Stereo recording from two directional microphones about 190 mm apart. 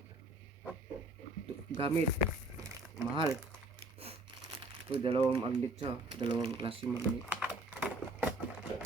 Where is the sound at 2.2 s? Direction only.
15° right (ahead or behind).